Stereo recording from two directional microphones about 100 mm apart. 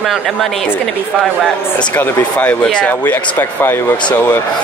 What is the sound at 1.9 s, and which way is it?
A man's voice, 15° left (ahead or behind).